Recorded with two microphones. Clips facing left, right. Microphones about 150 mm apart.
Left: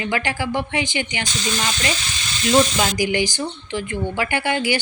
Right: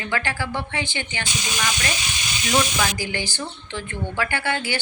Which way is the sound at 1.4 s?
15° right (ahead or behind).